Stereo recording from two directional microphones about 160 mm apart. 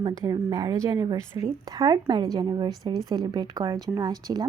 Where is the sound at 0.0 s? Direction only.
25° right (ahead or behind).